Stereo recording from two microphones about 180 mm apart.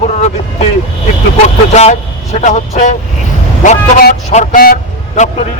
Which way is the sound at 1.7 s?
40° left (ahead or behind).